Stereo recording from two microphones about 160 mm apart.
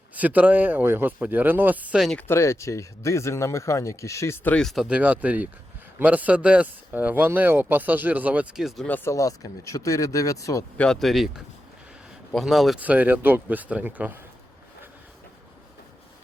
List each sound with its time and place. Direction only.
0.1 s speech: 10° right (ahead or behind)
2.1 s speech: 15° left (ahead or behind)
9.0 s speech: 20° left (ahead or behind)
10.8 s speech: 5° left (ahead or behind)